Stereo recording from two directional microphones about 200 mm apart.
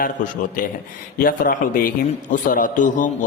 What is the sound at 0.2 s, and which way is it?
A man's voice, 40° left (ahead or behind).